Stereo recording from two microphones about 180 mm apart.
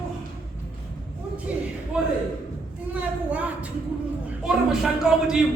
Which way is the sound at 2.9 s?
5° right (ahead or behind).